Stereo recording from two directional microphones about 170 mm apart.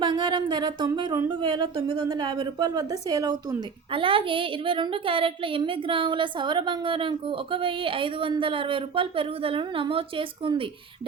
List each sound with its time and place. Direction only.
0.0 s a woman's voice: 30° right (ahead or behind)